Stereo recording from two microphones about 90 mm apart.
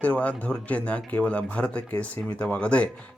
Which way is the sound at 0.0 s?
15° left (ahead or behind).